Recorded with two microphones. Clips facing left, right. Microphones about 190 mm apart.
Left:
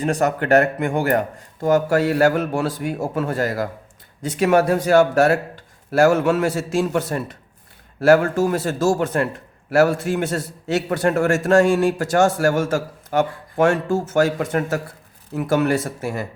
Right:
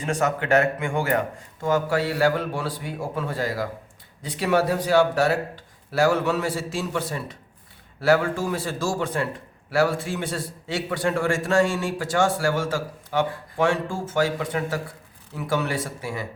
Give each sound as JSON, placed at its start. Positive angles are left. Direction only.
{"t": 0.0, "sound": "a man's voice", "side_deg": 40}